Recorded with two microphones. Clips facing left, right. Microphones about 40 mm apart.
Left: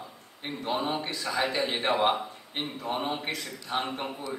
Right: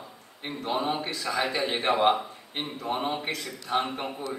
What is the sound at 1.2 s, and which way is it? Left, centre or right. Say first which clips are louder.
Speech: even; right.